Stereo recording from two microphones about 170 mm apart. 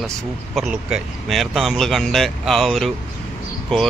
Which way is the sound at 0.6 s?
5° right (ahead or behind).